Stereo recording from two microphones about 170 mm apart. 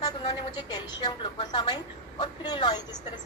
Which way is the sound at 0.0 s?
25° left (ahead or behind).